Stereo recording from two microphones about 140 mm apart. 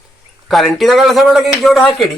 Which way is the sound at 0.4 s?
Centre (ahead or behind).